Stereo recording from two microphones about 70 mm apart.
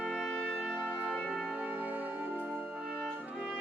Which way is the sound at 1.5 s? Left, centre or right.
Right.